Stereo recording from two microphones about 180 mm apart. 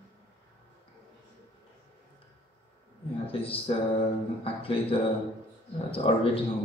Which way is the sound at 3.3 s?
30° left (ahead or behind).